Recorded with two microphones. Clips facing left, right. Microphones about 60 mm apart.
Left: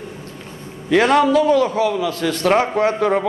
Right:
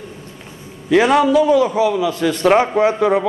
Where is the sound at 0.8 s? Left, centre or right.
Centre.